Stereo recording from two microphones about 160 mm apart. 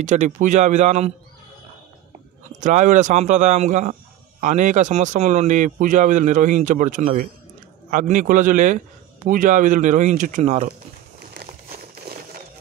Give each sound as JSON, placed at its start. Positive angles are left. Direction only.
{"t": 0.0, "sound": "speech", "side_deg": -50}
{"t": 2.6, "sound": "speech", "side_deg": -50}